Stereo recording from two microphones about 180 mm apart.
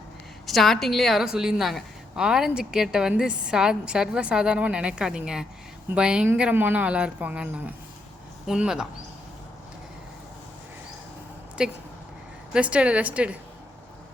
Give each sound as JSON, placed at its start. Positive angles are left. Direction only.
{"t": 0.4, "sound": "a woman's voice", "side_deg": 0}
{"t": 11.6, "sound": "a woman's voice", "side_deg": -5}